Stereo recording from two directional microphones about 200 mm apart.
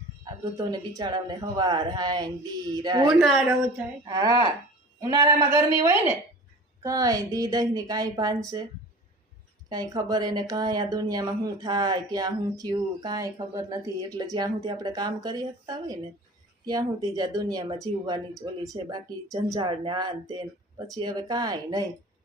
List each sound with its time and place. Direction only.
0.5 s speech: 20° right (ahead or behind)
3.2 s speech: centre (ahead or behind)
4.0 s speech: 20° right (ahead or behind)
9.6 s speech: 20° right (ahead or behind)